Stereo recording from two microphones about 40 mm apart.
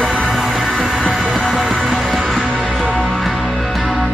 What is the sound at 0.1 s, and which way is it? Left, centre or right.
Music, centre.